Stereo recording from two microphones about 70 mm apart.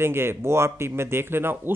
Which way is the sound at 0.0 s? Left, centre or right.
Right.